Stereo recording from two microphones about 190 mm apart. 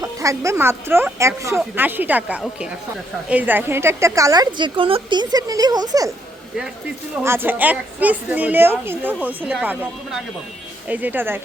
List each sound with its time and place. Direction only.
0.0 s a woman's voice: 15° right (ahead or behind)
7.2 s a woman's voice: 10° right (ahead or behind)